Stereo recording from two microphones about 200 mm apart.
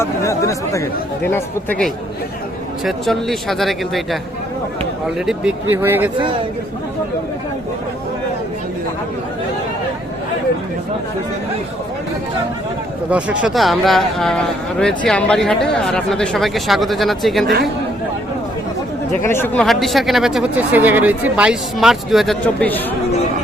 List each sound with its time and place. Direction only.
0.0 s speech: 15° left (ahead or behind)
5.2 s speech: 5° right (ahead or behind)
13.1 s speech: 5° right (ahead or behind)
17.4 s speech: 50° right (ahead or behind)
19.2 s speech: 10° left (ahead or behind)
19.6 s speech: centre (ahead or behind)